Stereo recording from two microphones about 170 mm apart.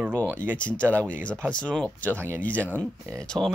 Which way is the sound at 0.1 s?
10° left (ahead or behind).